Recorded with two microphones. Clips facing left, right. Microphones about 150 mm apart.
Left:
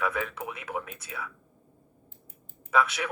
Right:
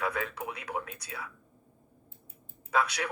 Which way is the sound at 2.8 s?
25° left (ahead or behind).